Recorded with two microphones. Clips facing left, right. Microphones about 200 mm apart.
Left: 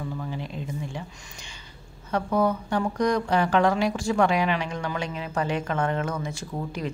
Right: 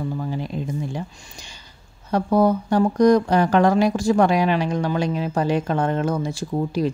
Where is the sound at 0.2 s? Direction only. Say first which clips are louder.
Right 6 dB; 40° right (ahead or behind).